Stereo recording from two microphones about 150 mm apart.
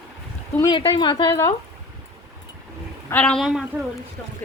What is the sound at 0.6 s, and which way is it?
Speech, 30° left (ahead or behind).